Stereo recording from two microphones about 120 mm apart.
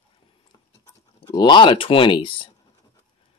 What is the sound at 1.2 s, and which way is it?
Speech, 35° left (ahead or behind).